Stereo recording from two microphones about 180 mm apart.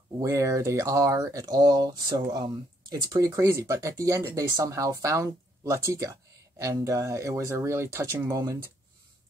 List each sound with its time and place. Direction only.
0.2 s speech: 15° right (ahead or behind)